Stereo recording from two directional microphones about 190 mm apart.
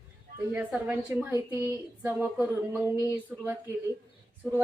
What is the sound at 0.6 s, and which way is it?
A woman's voice, 10° right (ahead or behind).